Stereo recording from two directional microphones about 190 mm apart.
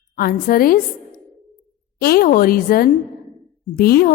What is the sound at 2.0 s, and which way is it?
A woman's voice, 50° left (ahead or behind).